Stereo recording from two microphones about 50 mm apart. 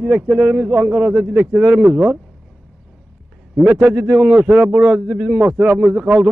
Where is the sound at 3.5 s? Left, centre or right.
Right.